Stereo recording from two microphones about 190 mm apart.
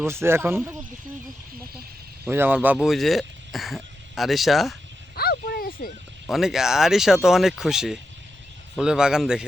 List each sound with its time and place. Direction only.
0.0 s speech: 15° right (ahead or behind)
2.2 s speech: 10° right (ahead or behind)
5.1 s a sound: 55° left (ahead or behind)
6.3 s speech: centre (ahead or behind)